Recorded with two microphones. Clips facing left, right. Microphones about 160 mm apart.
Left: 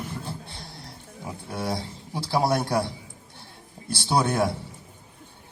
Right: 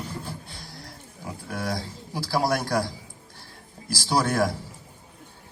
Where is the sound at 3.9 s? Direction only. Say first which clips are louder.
Even; 20° left (ahead or behind).